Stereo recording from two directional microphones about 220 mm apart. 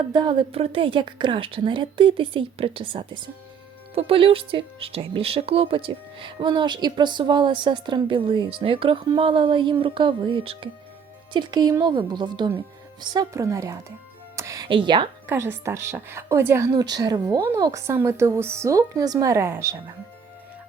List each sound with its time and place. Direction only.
0.1 s a woman's voice: 20° right (ahead or behind)
14.3 s music: 15° right (ahead or behind)
15.3 s a woman's voice: 10° right (ahead or behind)